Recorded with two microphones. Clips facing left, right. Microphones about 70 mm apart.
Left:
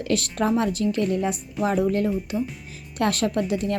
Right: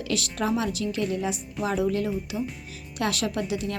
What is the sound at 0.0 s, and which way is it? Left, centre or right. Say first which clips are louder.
A woman's voice: left 4 dB; left.